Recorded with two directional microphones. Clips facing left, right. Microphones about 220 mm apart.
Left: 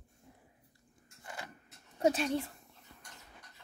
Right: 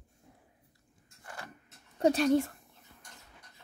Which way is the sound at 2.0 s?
35° right (ahead or behind).